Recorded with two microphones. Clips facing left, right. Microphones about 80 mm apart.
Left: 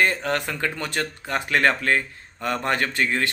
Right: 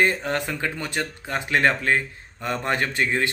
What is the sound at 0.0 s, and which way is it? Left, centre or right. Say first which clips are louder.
A man's voice: even; right.